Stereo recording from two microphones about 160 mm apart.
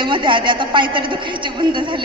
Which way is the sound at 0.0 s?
30° right (ahead or behind).